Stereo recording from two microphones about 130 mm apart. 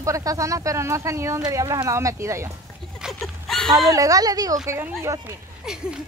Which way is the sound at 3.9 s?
25° right (ahead or behind).